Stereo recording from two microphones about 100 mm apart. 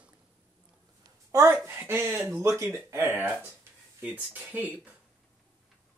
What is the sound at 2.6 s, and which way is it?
Speech, 30° right (ahead or behind).